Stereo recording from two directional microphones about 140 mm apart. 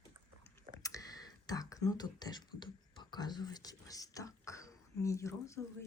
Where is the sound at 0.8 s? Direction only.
25° left (ahead or behind).